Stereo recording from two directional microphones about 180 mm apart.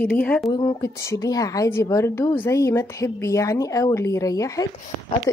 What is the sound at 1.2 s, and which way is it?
A woman's voice, 20° left (ahead or behind).